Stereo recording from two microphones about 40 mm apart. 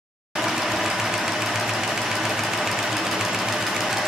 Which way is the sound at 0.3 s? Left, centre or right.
Centre.